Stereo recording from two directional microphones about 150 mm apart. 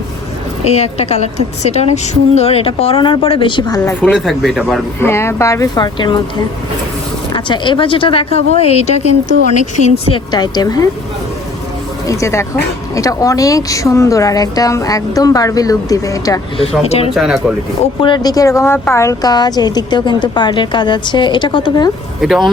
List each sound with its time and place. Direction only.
0.6 s a woman's voice: 45° left (ahead or behind); by 3.9 s 25° left (ahead or behind)
4.1 s speech: 5° right (ahead or behind)
4.9 s a woman's voice: 15° left (ahead or behind)
7.3 s a woman's voice: 30° left (ahead or behind); by 9.9 s 55° left (ahead or behind)
10.1 s a woman's voice: 25° left (ahead or behind)
12.0 s a woman's voice: 20° left (ahead or behind)
16.8 s a woman's voice: 45° left (ahead or behind)
17.2 s speech: centre (ahead or behind)
18.0 s a woman's voice: 30° left (ahead or behind)
22.2 s speech: centre (ahead or behind)